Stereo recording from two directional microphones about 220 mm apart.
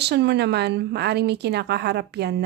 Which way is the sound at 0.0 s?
50° right (ahead or behind).